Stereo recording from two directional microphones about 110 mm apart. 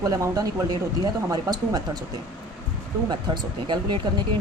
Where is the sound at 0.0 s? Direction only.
35° right (ahead or behind).